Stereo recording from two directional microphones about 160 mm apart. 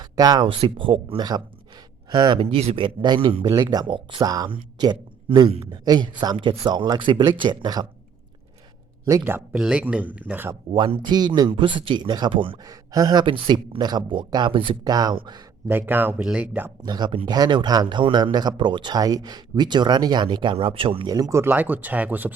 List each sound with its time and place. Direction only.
0.0 s speech: 25° right (ahead or behind)
5.5 s speech: 35° right (ahead or behind)
5.8 s speech: 25° right (ahead or behind)
9.0 s speech: 20° right (ahead or behind)
10.7 s speech: 35° right (ahead or behind)
12.6 s speech: 20° right (ahead or behind)
15.6 s speech: 10° right (ahead or behind)
16.8 s speech: 25° right (ahead or behind); by 22.3 s 10° right (ahead or behind)